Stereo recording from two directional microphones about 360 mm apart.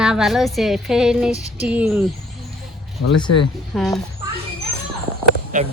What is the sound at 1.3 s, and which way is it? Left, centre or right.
Female singing, centre.